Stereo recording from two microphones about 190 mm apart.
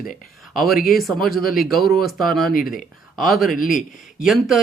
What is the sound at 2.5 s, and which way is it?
Speech, 45° left (ahead or behind).